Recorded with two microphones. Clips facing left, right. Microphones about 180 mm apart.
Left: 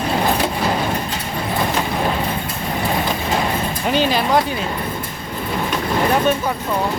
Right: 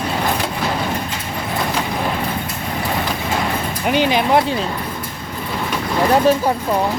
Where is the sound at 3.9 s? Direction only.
15° right (ahead or behind).